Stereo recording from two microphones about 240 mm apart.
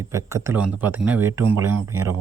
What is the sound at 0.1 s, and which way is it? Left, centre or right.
Speech, centre.